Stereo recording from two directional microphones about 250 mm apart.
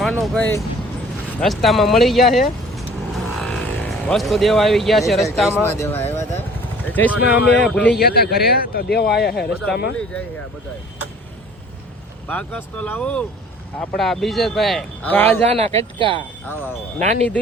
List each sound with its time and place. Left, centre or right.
0.0 s a man's voice: centre
6.8 s vehicle: centre
7.2 s a man's voice: left
7.6 s a man's voice: centre
7.9 s a man's voice: left
12.3 s a man's voice: centre
15.5 s speech: right